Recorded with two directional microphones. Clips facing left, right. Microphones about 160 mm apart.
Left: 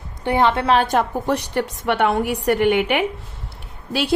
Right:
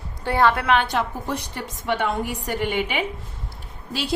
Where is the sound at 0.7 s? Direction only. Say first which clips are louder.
Left 4 dB; 45° left (ahead or behind).